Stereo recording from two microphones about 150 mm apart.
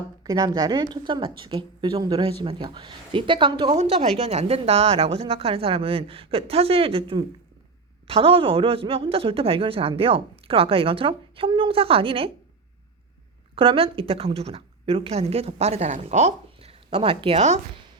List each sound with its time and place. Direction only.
0.2 s a woman's voice: 25° right (ahead or behind)
3.8 s speech: 45° right (ahead or behind)
13.6 s speech: 40° right (ahead or behind)